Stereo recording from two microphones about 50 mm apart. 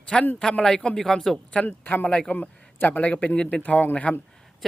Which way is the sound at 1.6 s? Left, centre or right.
Left.